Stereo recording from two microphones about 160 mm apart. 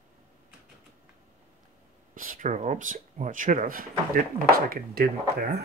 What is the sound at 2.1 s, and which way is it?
Speech, 55° right (ahead or behind).